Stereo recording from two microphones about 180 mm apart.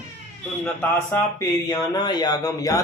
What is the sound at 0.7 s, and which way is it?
Speech, 15° left (ahead or behind).